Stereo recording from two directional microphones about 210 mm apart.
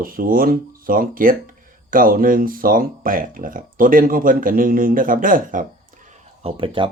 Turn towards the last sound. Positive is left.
turn(degrees=-25)  # may be behind; listen again after turning